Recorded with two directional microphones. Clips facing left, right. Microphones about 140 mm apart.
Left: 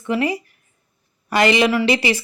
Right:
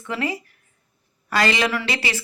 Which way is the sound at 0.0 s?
15° left (ahead or behind).